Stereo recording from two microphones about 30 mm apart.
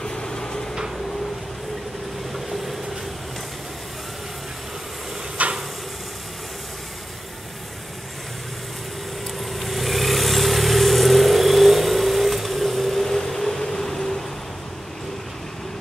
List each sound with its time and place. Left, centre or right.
0.0 s vehicle: left
2.3 s train: centre
5.4 s a sound: right
9.4 s vehicle: centre
13.0 s vehicle: centre